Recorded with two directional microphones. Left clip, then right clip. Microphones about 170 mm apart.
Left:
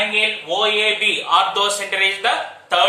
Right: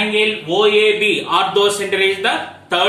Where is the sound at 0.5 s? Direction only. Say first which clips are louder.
Right 6 dB; 10° left (ahead or behind).